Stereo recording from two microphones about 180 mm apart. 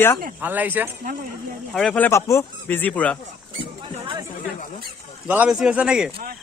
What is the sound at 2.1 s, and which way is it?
A man's voice, 15° left (ahead or behind).